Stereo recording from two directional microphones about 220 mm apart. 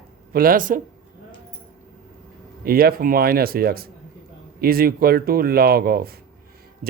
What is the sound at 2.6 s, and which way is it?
Speech, 45° right (ahead or behind).